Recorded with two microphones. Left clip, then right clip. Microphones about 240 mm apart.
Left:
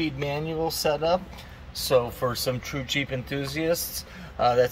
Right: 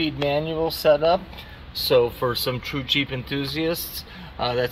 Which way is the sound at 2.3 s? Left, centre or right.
Centre.